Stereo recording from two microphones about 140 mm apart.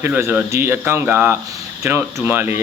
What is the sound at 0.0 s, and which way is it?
Speech, 15° right (ahead or behind).